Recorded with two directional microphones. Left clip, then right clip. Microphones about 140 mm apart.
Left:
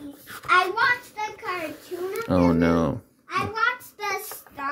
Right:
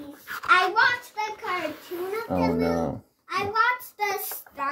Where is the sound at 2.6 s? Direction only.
85° left.